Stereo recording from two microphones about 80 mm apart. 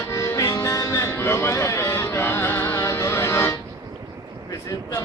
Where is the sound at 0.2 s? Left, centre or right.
Left.